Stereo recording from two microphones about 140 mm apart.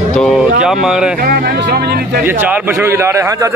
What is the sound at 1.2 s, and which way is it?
Speech, 90° right.